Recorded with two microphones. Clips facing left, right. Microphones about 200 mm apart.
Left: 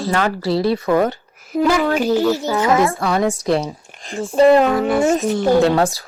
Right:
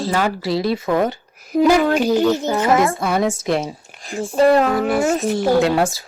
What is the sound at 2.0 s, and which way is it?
Speech, 15° right (ahead or behind).